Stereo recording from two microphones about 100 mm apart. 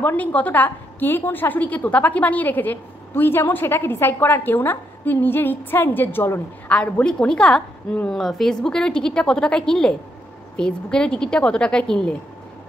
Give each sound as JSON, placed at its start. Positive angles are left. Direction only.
{"t": 0.0, "sound": "a woman's voice", "side_deg": 15}
{"t": 6.7, "sound": "a woman's voice", "side_deg": 10}